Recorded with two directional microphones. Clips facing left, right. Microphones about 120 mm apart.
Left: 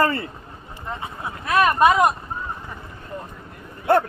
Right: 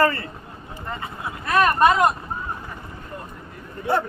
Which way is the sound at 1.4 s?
Centre (ahead or behind).